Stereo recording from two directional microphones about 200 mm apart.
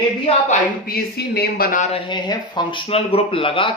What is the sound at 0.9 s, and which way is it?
Speech, 55° left (ahead or behind).